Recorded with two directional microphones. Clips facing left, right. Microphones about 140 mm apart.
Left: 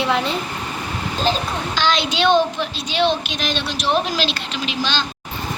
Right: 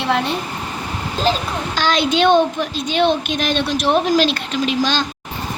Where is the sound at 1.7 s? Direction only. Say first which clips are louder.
Right 4 dB; 50° right (ahead or behind).